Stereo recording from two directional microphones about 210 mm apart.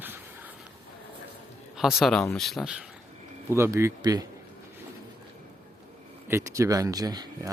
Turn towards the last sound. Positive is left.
turn(degrees=-20)  # may be behind; listen again after turning